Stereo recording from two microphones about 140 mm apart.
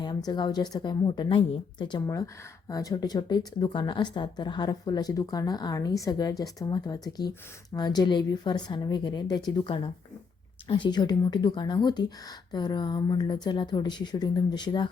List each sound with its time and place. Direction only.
0.3 s speech: 30° left (ahead or behind)
2.0 s speech: 25° left (ahead or behind)